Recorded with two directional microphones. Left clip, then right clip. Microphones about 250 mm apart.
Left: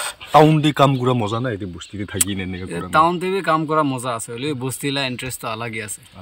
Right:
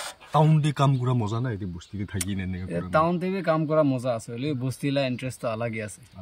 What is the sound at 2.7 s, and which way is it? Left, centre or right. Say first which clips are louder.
Speech: left 7 dB; centre.